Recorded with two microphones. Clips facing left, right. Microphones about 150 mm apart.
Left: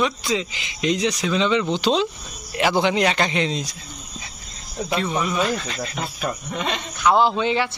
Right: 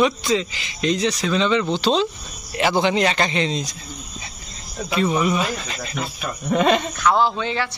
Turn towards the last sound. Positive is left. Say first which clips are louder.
# left 2 dB
turn(degrees=20)  # may be behind; listen again after turning